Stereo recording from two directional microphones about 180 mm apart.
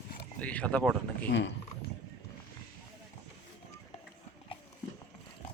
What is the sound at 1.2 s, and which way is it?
Speech, 80° left.